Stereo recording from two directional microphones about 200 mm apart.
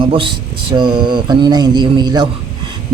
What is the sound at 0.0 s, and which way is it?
Speech, 25° right (ahead or behind).